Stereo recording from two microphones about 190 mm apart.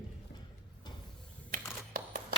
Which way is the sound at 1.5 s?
50° right (ahead or behind).